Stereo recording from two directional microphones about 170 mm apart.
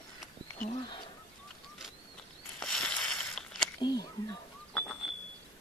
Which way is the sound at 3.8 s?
25° left (ahead or behind).